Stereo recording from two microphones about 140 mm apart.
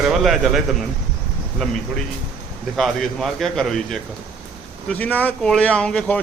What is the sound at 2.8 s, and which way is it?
Speech, centre (ahead or behind).